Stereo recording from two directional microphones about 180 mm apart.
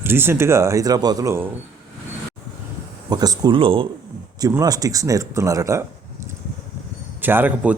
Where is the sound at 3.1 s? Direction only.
20° right (ahead or behind).